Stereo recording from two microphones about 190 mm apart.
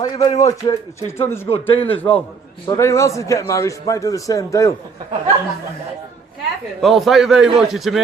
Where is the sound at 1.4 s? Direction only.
30° left (ahead or behind).